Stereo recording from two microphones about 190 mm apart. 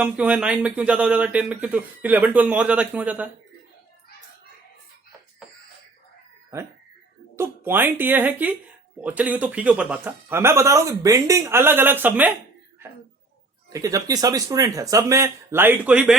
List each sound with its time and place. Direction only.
0.0 s speech: 5° right (ahead or behind)
7.3 s speech: 10° right (ahead or behind)
13.7 s speech: 20° right (ahead or behind)